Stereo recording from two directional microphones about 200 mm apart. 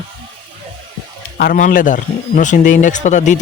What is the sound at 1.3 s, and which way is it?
A man's voice, 45° left (ahead or behind).